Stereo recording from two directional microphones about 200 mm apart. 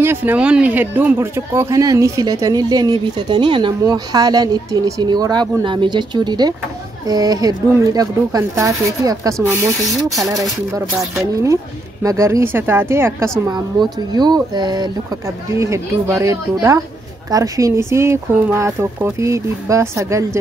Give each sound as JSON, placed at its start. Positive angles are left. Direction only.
{"t": 0.0, "sound": "speech", "side_deg": -10}